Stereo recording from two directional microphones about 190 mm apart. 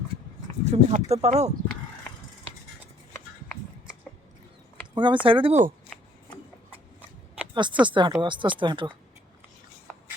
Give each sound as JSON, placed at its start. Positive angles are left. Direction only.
{"t": 0.6, "sound": "speech", "side_deg": -35}
{"t": 4.9, "sound": "speech", "side_deg": -25}
{"t": 7.5, "sound": "speech", "side_deg": -25}